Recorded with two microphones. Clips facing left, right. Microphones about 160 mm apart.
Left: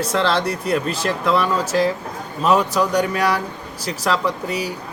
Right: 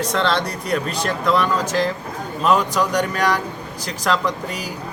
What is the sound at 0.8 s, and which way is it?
Speech, 5° left (ahead or behind).